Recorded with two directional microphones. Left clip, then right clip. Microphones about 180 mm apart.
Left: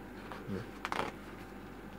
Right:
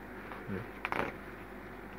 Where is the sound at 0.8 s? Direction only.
15° left (ahead or behind).